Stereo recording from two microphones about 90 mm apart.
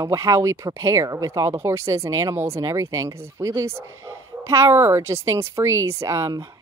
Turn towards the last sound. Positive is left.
turn(degrees=-40)  # may be behind; listen again after turning